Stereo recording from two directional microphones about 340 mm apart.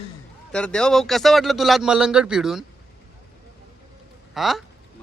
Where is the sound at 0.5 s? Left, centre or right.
Centre.